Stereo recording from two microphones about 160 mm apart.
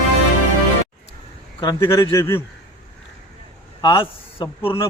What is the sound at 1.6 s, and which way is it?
Speech, 20° left (ahead or behind).